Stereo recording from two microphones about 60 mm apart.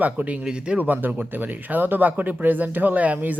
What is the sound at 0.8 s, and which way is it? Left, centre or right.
Speech, right.